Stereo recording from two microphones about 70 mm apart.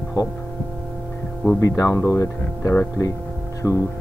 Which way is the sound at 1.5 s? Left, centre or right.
Left.